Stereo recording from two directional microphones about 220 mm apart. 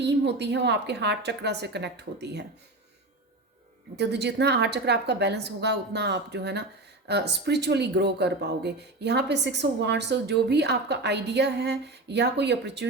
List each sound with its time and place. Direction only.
0.0 s speech: 50° right (ahead or behind)
3.9 s speech: 50° right (ahead or behind)